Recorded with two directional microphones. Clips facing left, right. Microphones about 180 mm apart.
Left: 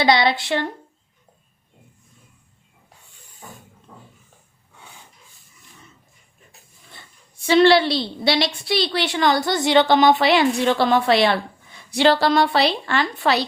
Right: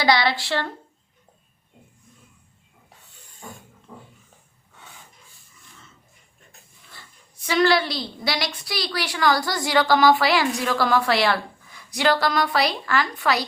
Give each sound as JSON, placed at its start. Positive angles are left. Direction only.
{"t": 0.0, "sound": "a woman's voice", "side_deg": 20}
{"t": 6.9, "sound": "a woman's voice", "side_deg": 25}